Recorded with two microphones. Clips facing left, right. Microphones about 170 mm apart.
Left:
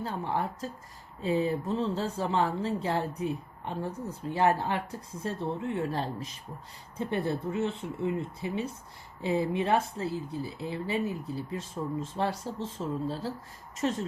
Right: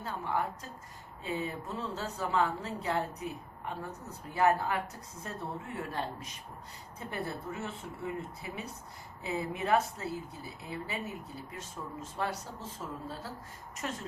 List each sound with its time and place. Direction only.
0.0 s speech: 30° left (ahead or behind)